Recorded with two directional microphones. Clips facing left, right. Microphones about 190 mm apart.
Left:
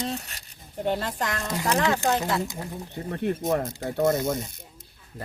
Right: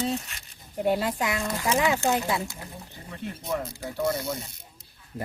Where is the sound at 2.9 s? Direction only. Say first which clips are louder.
Left 11 dB; 60° left (ahead or behind).